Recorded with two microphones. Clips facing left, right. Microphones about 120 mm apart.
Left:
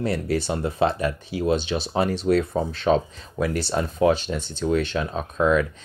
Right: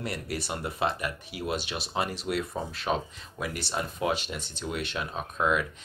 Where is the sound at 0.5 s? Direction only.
30° left (ahead or behind).